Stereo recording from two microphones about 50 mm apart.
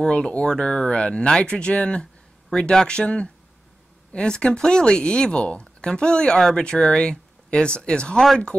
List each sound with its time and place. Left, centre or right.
0.0 s speech: centre
6.3 s speech: centre